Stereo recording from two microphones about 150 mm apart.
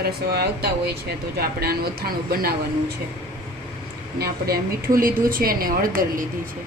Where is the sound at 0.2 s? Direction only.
90° right.